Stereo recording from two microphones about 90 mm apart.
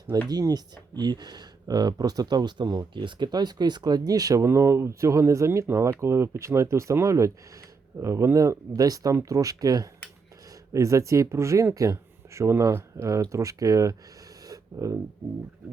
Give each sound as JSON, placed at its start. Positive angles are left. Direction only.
{"t": 0.3, "sound": "speech", "side_deg": -45}
{"t": 4.4, "sound": "speech", "side_deg": -30}
{"t": 14.4, "sound": "a sound", "side_deg": -40}